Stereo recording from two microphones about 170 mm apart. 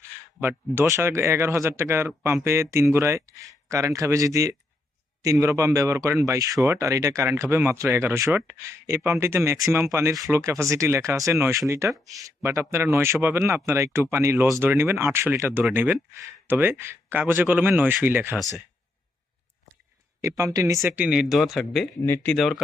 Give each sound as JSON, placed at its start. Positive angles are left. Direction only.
{"t": 0.3, "sound": "speech", "side_deg": -15}
{"t": 20.2, "sound": "speech", "side_deg": -20}
{"t": 20.8, "sound": "speech", "side_deg": -10}
{"t": 22.0, "sound": "speech", "side_deg": 15}